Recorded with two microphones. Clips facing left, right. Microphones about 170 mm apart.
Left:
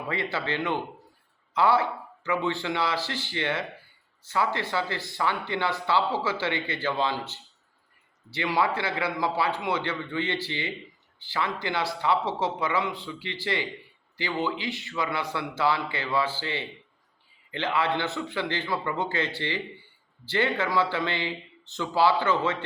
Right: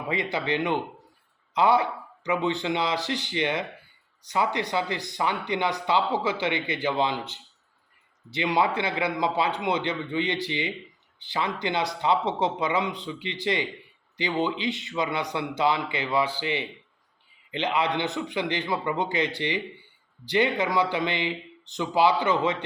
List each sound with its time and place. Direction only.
0.1 s speech: 15° right (ahead or behind)